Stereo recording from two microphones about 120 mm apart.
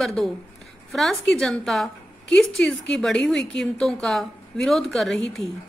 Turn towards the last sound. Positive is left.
turn(degrees=5)  # may be behind; listen again after turning